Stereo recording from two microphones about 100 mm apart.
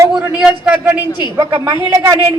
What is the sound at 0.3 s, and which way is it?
Speech, 10° right (ahead or behind).